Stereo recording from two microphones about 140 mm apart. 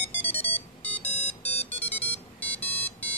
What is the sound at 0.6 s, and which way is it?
Music, 50° left (ahead or behind).